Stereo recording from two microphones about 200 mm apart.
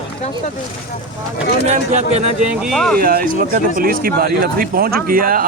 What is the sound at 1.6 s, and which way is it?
Speech, 35° right (ahead or behind).